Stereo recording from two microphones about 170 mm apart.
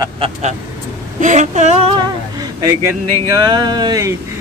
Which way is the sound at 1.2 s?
45° right (ahead or behind).